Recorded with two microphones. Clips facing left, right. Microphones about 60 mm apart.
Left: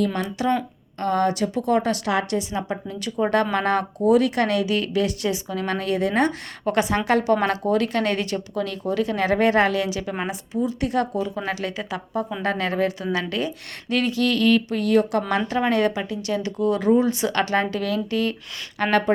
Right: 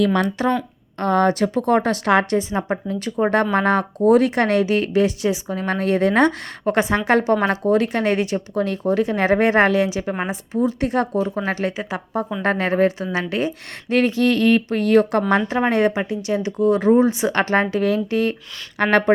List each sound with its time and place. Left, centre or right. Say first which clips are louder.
0.0 s speech: right 5 dB; right
0.9 s speech: right 4 dB; right
6.7 s speech: right 3 dB; right
8.5 s speech: right 5 dB; right
10.5 s speech: right 3 dB; right
15.4 s speech: right 3 dB; right
18.8 s speech: right 4 dB; right